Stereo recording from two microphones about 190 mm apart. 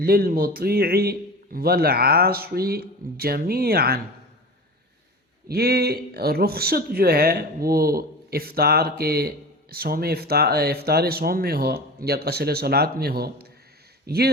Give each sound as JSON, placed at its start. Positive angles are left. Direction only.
{"t": 0.0, "sound": "speech", "side_deg": -50}
{"t": 5.5, "sound": "speech", "side_deg": -55}